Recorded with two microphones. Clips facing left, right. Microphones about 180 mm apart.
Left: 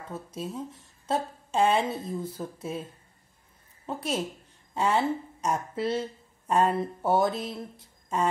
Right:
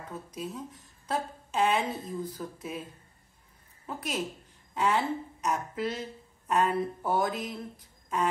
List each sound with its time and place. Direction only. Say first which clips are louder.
0.1 s a woman's voice: left 3 dB; 25° left (ahead or behind)
3.8 s a woman's voice: left 3 dB; 30° left (ahead or behind)